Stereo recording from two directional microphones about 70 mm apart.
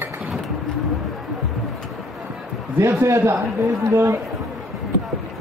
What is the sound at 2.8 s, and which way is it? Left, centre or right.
A man's voice, right.